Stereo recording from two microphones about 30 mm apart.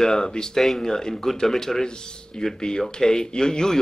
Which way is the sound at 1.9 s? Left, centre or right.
Left.